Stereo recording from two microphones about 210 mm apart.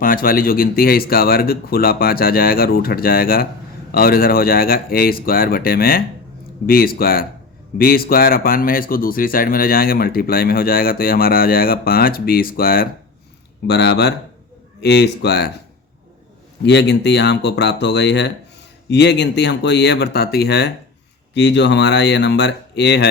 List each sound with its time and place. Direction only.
0.0 s speech: 40° left (ahead or behind)
16.6 s speech: 55° left (ahead or behind)